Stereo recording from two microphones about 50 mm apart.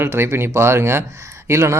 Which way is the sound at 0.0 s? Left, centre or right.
Right.